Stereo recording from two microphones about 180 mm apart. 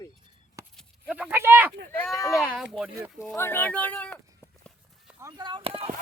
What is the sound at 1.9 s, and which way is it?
Speech, 10° left (ahead or behind).